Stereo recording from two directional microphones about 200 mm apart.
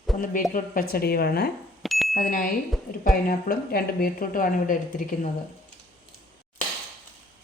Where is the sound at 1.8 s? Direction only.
Centre (ahead or behind).